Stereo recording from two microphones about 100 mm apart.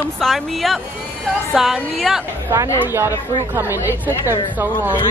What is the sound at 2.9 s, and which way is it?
Speech, 25° right (ahead or behind).